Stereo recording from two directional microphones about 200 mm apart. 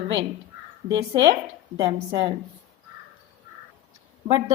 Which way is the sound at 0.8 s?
20° right (ahead or behind).